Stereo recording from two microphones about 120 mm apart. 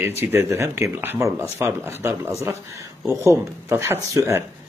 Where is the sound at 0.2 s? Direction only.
15° right (ahead or behind).